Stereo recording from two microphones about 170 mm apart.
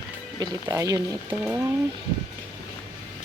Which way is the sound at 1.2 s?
10° right (ahead or behind).